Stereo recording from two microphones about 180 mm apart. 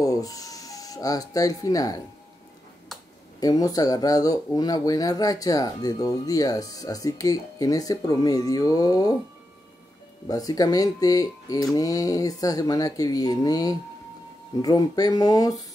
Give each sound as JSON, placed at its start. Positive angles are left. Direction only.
{"t": 0.0, "sound": "speech", "side_deg": 20}
{"t": 3.3, "sound": "speech", "side_deg": 20}
{"t": 10.2, "sound": "speech", "side_deg": 20}